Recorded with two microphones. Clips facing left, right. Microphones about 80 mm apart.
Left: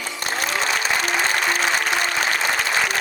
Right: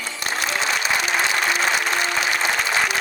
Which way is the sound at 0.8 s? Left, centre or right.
Left.